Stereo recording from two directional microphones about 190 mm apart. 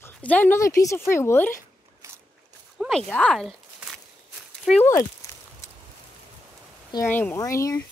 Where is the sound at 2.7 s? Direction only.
Centre (ahead or behind).